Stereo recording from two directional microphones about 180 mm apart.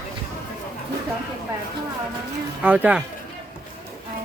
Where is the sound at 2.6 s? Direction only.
5° right (ahead or behind).